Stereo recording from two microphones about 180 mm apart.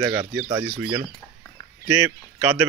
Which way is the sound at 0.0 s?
20° right (ahead or behind).